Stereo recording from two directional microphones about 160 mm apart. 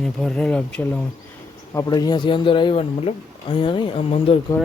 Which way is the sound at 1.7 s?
25° left (ahead or behind).